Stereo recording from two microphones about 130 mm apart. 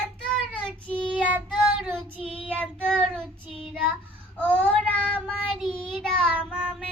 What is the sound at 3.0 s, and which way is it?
Child singing, 5° left (ahead or behind).